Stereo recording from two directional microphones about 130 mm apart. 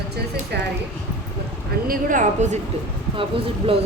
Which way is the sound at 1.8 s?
90° right.